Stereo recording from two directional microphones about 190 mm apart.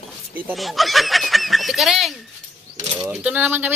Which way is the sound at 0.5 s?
Centre (ahead or behind).